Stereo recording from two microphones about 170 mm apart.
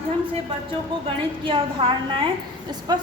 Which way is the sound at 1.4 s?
30° right (ahead or behind).